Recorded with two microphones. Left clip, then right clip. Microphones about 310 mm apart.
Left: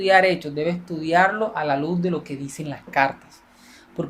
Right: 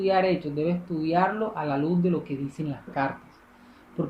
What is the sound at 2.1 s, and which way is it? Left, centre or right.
Speech, left.